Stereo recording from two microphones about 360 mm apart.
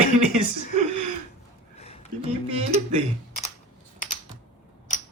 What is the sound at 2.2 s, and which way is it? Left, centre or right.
Speech, centre.